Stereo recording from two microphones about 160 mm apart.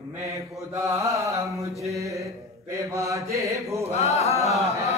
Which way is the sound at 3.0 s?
20° right (ahead or behind).